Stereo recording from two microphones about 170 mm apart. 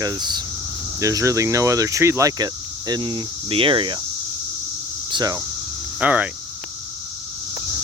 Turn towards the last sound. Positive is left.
turn(degrees=-10)  # may be behind; listen again after turning